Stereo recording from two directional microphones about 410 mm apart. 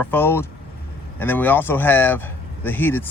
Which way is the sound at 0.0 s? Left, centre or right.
Centre.